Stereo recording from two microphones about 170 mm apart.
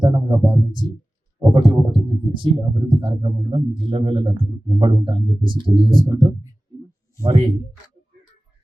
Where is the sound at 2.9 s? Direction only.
30° right (ahead or behind).